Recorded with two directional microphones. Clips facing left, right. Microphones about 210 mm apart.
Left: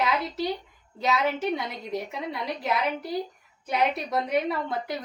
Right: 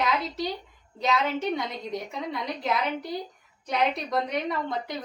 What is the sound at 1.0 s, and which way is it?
A woman's voice, 5° left (ahead or behind).